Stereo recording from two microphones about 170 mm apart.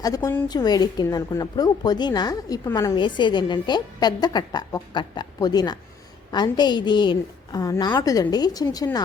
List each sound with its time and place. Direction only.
0.0 s a woman's voice: 15° left (ahead or behind)